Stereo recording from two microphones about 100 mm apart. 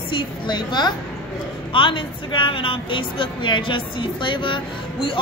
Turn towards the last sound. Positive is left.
turn(degrees=60)  # may be behind; listen again after turning